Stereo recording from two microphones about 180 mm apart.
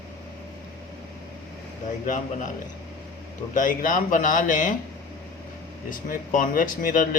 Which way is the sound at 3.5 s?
45° left (ahead or behind).